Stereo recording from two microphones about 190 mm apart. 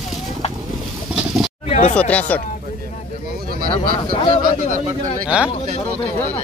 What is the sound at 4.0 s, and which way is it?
Speech, 25° left (ahead or behind).